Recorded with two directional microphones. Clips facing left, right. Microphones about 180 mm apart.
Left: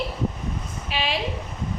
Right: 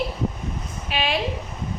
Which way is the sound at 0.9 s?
55° right (ahead or behind).